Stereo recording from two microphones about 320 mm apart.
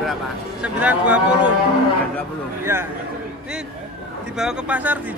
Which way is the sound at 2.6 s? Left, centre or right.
Centre.